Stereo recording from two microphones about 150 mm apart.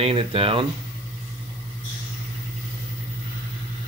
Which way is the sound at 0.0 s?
35° right (ahead or behind).